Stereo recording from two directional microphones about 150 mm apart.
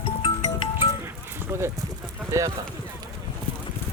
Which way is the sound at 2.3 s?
20° right (ahead or behind).